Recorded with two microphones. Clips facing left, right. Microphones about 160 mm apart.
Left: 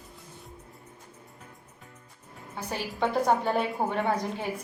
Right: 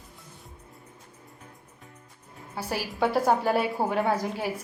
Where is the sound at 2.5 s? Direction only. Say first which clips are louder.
Right 3 dB; 5° right (ahead or behind).